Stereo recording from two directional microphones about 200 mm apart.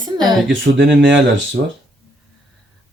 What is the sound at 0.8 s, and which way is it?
Speech, 65° right (ahead or behind).